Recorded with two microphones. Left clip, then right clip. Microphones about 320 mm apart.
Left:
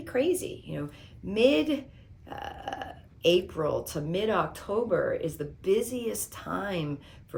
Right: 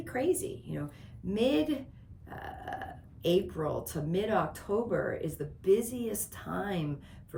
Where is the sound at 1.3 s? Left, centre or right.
Centre.